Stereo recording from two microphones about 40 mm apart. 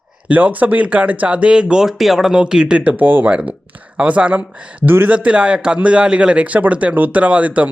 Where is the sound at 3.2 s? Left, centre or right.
Right.